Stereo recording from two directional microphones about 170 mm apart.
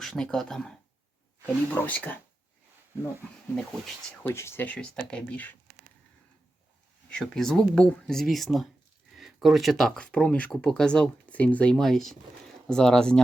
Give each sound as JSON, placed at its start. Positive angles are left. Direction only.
{"t": 0.0, "sound": "speech", "side_deg": 5}
{"t": 1.7, "sound": "speech", "side_deg": 10}
{"t": 3.5, "sound": "speech", "side_deg": 10}
{"t": 7.1, "sound": "speech", "side_deg": 5}